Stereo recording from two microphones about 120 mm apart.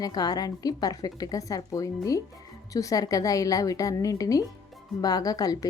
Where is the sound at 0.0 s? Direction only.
35° left (ahead or behind).